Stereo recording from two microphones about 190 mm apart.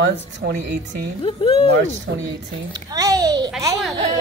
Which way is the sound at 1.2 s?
30° left (ahead or behind).